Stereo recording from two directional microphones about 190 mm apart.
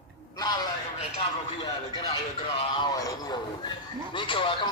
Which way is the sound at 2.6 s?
25° left (ahead or behind).